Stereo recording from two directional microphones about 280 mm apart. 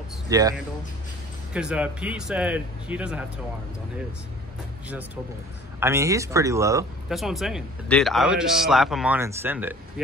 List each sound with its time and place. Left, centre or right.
0.3 s a man's voice: centre
4.8 s a man's voice: centre
7.2 s a man's voice: centre